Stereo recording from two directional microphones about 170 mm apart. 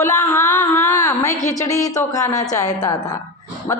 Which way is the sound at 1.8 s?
20° left (ahead or behind).